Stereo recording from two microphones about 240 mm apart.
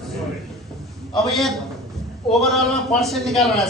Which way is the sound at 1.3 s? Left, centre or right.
Centre.